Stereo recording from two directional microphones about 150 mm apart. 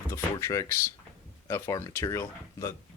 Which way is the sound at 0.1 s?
20° left (ahead or behind).